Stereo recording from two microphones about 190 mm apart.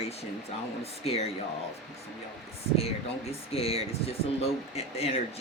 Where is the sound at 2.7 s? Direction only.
30° left (ahead or behind).